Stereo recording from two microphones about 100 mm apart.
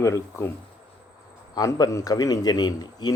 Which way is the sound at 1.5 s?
35° left (ahead or behind).